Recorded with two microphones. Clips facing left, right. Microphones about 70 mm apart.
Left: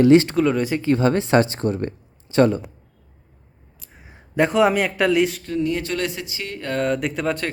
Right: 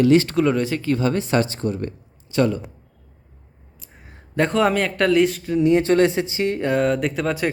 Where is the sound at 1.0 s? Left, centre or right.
Left.